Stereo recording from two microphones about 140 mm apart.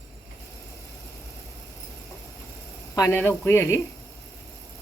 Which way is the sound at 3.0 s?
20° left (ahead or behind).